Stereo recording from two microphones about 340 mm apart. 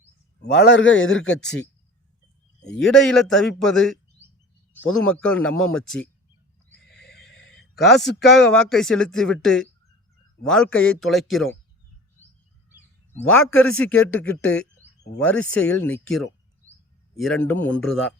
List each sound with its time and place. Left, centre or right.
0.4 s a man's voice: left
2.6 s a man's voice: left
2.8 s speech: centre
6.9 s neigh: left
7.3 s a sound: left
7.8 s speech: centre
13.6 s speech: centre